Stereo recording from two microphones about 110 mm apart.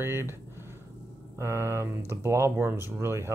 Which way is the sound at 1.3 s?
25° right (ahead or behind).